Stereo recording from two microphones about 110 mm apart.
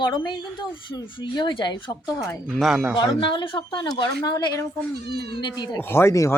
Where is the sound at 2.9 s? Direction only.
45° left (ahead or behind).